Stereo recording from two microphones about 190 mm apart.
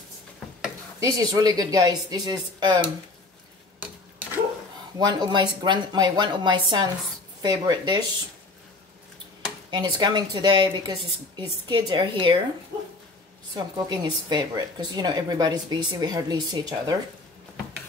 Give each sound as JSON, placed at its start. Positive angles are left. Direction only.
{"t": 0.9, "sound": "speech", "side_deg": -20}
{"t": 4.9, "sound": "speech", "side_deg": -20}
{"t": 9.7, "sound": "speech", "side_deg": -20}
{"t": 13.6, "sound": "speech", "side_deg": -25}